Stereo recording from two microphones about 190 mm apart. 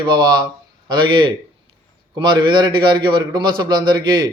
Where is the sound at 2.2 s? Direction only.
25° right (ahead or behind).